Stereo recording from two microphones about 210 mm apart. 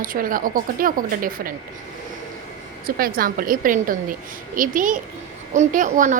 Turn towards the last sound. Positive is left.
turn(degrees=-35)  # may be behind; listen again after turning